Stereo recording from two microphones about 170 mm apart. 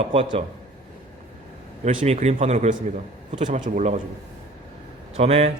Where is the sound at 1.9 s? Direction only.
45° right (ahead or behind).